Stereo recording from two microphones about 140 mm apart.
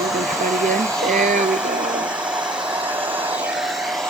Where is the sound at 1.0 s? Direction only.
Centre (ahead or behind).